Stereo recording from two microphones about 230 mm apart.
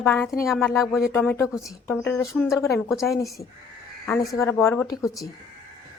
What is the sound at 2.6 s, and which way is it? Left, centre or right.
Speech, centre.